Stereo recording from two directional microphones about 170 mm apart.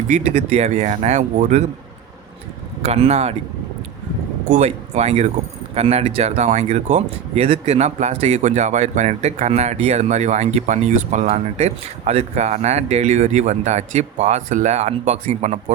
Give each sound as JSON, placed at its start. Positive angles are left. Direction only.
{"t": 0.1, "sound": "speech", "side_deg": -40}
{"t": 2.8, "sound": "speech", "side_deg": -40}
{"t": 4.4, "sound": "speech", "side_deg": -45}